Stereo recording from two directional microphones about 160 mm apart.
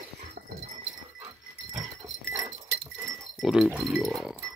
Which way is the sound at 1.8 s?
20° right (ahead or behind).